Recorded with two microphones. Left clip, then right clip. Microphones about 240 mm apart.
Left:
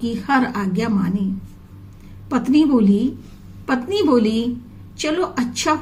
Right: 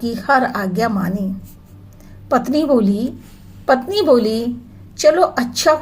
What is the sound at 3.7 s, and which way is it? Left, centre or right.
A woman's voice, centre.